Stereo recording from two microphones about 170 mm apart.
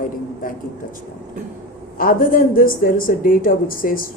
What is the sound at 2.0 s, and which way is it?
A woman's voice, 55° left (ahead or behind).